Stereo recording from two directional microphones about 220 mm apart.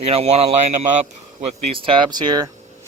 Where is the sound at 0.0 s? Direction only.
30° right (ahead or behind).